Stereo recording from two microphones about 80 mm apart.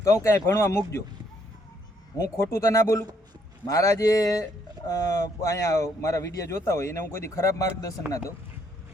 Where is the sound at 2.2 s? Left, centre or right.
Left.